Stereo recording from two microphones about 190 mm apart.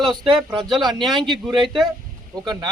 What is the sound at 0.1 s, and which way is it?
Speech, 25° right (ahead or behind).